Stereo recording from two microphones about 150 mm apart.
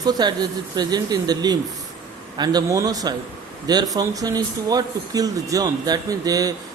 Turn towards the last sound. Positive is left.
turn(degrees=-25)  # may be behind; listen again after turning